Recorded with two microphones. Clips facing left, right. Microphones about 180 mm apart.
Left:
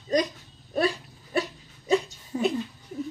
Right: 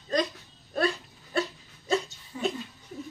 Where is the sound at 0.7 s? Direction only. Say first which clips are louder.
Left 2 dB; 15° left (ahead or behind).